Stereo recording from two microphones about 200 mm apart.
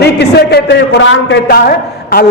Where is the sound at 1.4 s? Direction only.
50° left (ahead or behind).